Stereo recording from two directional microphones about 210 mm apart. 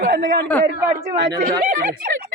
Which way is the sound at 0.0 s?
40° right (ahead or behind).